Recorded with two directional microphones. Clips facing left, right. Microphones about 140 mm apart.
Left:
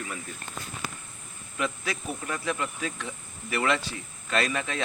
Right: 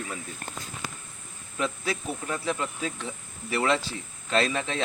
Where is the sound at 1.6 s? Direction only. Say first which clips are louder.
Right 2 dB; 30° right (ahead or behind).